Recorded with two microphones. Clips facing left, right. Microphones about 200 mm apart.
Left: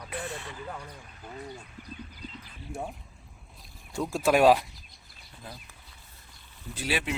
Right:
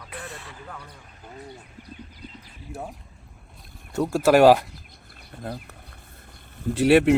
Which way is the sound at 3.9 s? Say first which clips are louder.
Right 6 dB; 65° right (ahead or behind).